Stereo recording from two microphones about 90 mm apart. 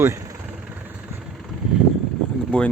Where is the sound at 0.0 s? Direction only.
35° right (ahead or behind).